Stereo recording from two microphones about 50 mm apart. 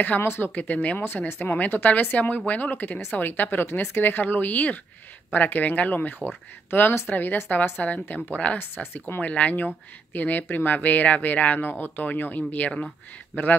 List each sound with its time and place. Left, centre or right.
0.2 s speech: left
0.6 s speech: left
0.9 s speech: left
8.5 s speech: left
9.2 s speech: left
12.7 s speech: centre